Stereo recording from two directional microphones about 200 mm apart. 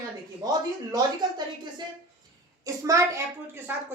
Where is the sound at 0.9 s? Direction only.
20° right (ahead or behind).